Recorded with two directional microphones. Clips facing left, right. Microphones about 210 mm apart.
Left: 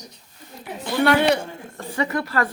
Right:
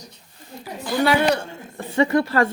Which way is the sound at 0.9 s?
Centre (ahead or behind).